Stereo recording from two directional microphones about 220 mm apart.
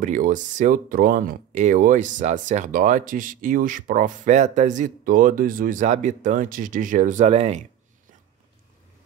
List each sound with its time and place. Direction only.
0.0 s speech: 35° right (ahead or behind)